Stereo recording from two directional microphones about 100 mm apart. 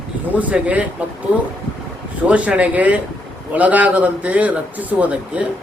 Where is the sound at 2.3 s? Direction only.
15° right (ahead or behind).